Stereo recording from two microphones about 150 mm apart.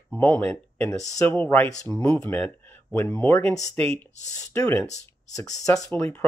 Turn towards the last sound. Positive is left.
turn(degrees=10)  # may be behind; listen again after turning